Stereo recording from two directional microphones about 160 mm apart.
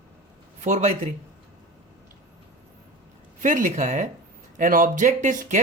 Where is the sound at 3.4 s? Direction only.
50° right (ahead or behind).